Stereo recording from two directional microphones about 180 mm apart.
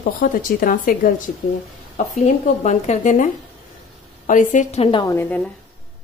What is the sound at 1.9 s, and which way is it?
Speech, 40° left (ahead or behind).